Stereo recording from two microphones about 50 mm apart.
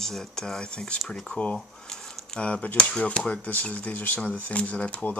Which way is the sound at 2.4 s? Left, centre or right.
Left.